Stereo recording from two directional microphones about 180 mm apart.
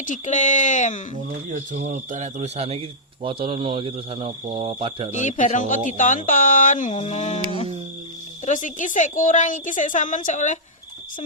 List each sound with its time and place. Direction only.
0.0 s speech: 45° left (ahead or behind)
1.5 s speech: 40° right (ahead or behind)
5.1 s speech: 45° left (ahead or behind)